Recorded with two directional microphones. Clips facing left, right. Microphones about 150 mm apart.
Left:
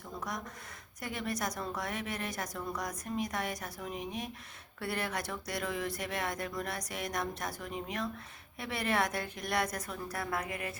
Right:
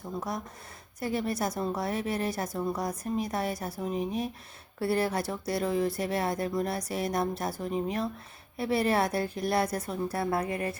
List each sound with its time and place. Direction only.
0.2 s a woman's voice: 30° right (ahead or behind)